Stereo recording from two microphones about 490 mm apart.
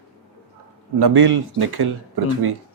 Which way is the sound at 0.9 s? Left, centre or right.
Right.